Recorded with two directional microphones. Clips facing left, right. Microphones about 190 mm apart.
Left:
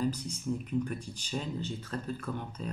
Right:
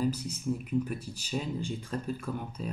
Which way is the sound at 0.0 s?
5° right (ahead or behind).